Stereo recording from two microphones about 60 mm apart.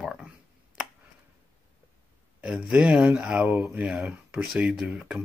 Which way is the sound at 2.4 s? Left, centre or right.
Centre.